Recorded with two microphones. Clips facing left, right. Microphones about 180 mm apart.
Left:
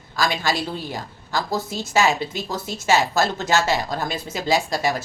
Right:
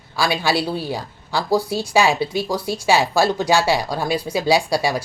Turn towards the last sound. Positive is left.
turn(degrees=-10)  # may be behind; listen again after turning